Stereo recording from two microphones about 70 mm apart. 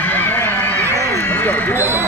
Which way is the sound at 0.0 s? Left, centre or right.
Left.